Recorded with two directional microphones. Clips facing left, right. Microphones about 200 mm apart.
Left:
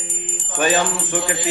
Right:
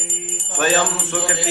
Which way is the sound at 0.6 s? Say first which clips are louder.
Even; 15° left (ahead or behind).